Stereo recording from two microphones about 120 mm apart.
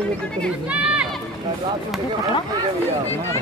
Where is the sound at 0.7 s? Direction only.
10° right (ahead or behind).